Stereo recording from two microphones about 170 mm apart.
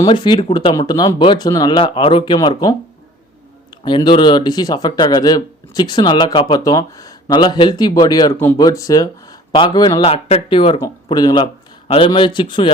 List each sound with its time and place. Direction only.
0.0 s speech: 25° left (ahead or behind)
3.8 s speech: 30° left (ahead or behind)
10.8 s speech: 20° left (ahead or behind)